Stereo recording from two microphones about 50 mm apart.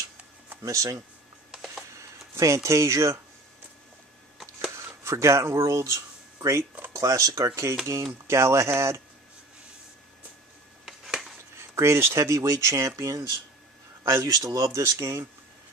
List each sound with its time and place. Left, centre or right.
0.7 s speech: right
1.5 s a sound: centre
2.0 s speech: right
4.7 s speech: right
8.3 s speech: right
10.9 s a sound: centre
11.5 s speech: right
14.0 s speech: right